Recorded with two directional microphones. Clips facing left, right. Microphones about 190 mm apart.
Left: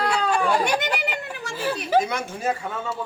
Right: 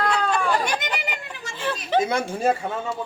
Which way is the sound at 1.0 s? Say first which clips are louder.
Left 3 dB; 60° left (ahead or behind).